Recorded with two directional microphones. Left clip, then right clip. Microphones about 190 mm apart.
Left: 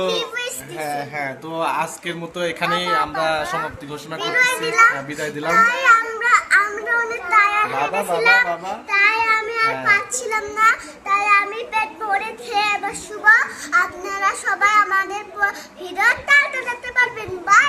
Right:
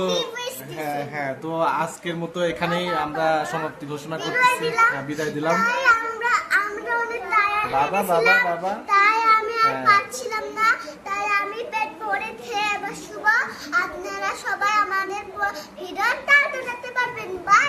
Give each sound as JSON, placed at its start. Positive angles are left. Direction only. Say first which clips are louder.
{"t": 0.0, "sound": "a child's voice", "louder": "left 2 dB", "side_deg": -5}
{"t": 4.4, "sound": "a child's voice", "louder": "left 3 dB", "side_deg": 0}
{"t": 5.0, "sound": "a child's voice", "louder": "even", "side_deg": -15}
{"t": 5.5, "sound": "a child's voice", "louder": "left 6 dB", "side_deg": 0}
{"t": 10.6, "sound": "a child's voice", "louder": "left 4 dB", "side_deg": 0}